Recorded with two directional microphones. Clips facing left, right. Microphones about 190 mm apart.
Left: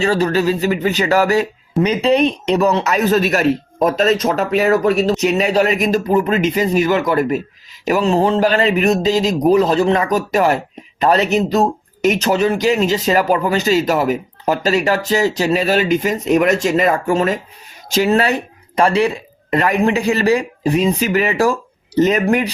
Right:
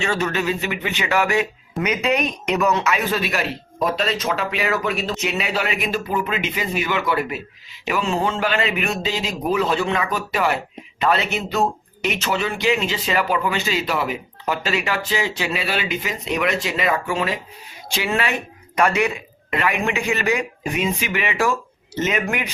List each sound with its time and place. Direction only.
0.0 s speech: 35° left (ahead or behind)